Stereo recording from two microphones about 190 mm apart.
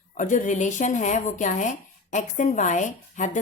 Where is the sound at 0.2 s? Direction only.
40° left (ahead or behind).